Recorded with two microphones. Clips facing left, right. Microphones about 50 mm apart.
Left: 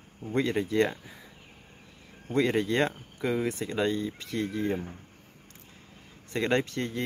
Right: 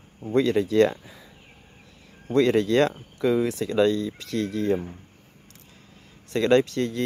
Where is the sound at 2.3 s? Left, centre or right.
Right.